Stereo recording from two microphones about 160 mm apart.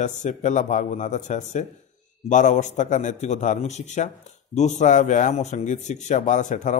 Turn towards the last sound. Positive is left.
turn(degrees=50)  # may be behind; listen again after turning